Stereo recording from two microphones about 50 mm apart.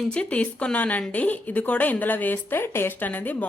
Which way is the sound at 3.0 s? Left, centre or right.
Left.